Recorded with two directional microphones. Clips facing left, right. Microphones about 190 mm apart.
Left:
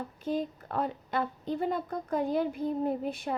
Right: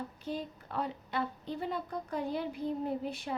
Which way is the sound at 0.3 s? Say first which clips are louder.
Left 8 dB; 50° left (ahead or behind).